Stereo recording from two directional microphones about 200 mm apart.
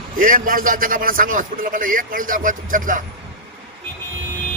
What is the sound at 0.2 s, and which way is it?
A man's voice, 40° right (ahead or behind).